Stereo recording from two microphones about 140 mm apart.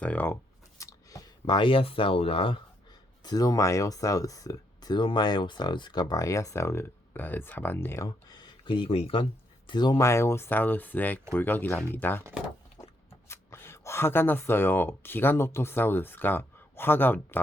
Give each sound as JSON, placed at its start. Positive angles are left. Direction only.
{"t": 0.0, "sound": "speech", "side_deg": 10}
{"t": 0.8, "sound": "speech", "side_deg": 25}
{"t": 3.2, "sound": "speech", "side_deg": 25}
{"t": 9.6, "sound": "speech", "side_deg": 30}